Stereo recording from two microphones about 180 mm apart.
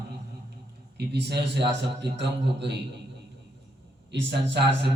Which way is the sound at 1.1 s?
70° right (ahead or behind).